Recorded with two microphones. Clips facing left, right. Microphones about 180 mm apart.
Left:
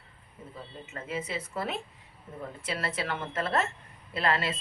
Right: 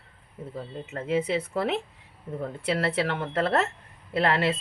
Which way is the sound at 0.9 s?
65° right (ahead or behind).